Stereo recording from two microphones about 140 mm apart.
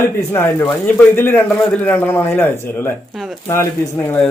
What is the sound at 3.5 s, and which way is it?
Speech, 20° left (ahead or behind).